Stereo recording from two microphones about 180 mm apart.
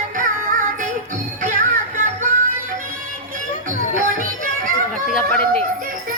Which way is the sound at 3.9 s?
50° right (ahead or behind).